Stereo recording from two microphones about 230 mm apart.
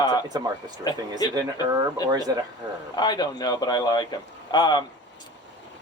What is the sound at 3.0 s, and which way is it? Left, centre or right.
Speech, centre.